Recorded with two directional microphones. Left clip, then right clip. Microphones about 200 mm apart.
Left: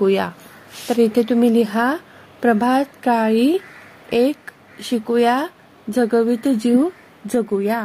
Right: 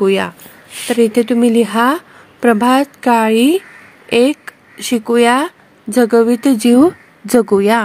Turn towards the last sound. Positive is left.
turn(degrees=-25)  # may be behind; listen again after turning